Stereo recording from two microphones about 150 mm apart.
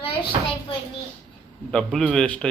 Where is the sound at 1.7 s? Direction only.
5° left (ahead or behind).